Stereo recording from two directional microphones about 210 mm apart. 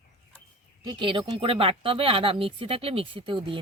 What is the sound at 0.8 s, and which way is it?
Speech, 25° right (ahead or behind).